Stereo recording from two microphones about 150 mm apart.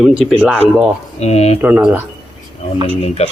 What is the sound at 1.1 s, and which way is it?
Speech, 45° left (ahead or behind).